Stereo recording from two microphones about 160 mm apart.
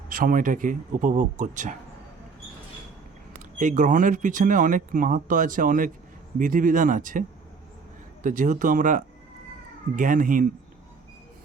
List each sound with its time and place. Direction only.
0.1 s speech: 60° right (ahead or behind)
3.6 s speech: 50° right (ahead or behind)